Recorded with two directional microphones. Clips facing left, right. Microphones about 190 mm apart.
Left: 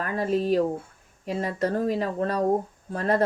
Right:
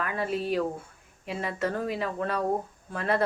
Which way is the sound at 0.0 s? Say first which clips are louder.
Left 5 dB; 40° left (ahead or behind).